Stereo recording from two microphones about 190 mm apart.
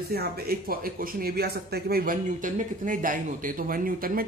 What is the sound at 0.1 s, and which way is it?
Speech, 55° right (ahead or behind).